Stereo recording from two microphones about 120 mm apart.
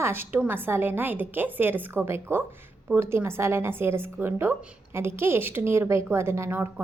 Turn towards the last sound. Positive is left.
turn(degrees=-20)  # may be behind; listen again after turning